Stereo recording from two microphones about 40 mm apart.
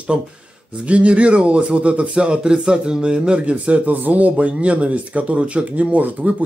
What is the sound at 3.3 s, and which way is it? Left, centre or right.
Speech, right.